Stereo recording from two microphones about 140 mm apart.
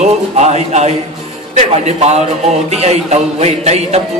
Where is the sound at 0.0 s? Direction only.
55° right (ahead or behind).